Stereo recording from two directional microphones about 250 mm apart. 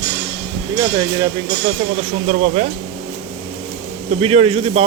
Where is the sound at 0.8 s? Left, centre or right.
Centre.